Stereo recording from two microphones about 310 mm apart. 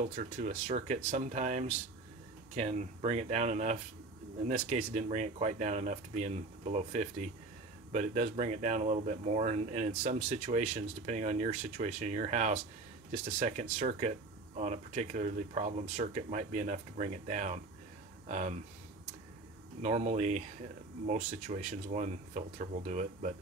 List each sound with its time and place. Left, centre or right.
0.1 s speech: right
19.8 s speech: right